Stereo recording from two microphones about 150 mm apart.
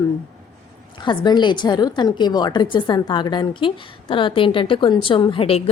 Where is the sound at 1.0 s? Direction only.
30° left (ahead or behind).